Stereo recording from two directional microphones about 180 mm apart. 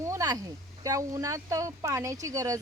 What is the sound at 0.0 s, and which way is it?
Speech, 15° right (ahead or behind).